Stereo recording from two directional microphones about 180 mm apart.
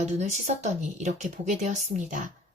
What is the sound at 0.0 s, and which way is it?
Speech, 40° right (ahead or behind).